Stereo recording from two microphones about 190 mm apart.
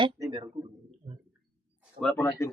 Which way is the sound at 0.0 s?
20° right (ahead or behind).